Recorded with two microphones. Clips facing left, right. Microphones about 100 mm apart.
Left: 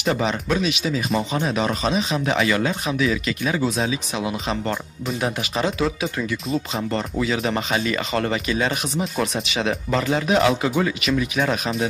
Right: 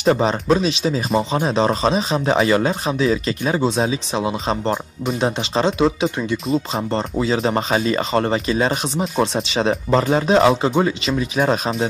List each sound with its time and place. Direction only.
0.0 s speech: 35° right (ahead or behind)